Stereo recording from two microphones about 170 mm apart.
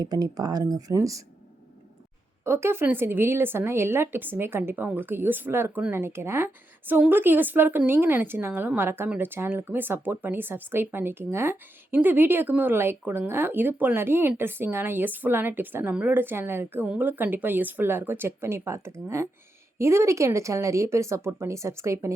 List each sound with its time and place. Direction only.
0.0 s speech: 20° right (ahead or behind)
2.4 s a woman's voice: 15° right (ahead or behind)